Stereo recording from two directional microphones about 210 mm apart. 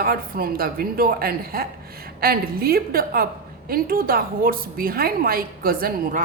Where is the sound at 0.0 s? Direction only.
45° right (ahead or behind).